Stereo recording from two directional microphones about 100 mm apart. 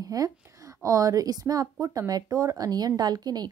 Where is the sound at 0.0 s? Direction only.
35° right (ahead or behind).